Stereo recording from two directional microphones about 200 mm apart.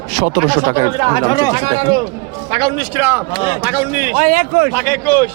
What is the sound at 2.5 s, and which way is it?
A man's voice, 25° right (ahead or behind).